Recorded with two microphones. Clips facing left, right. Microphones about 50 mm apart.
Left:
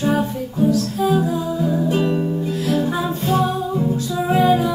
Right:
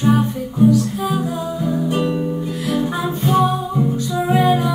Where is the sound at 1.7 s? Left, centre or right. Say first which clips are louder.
Even; centre.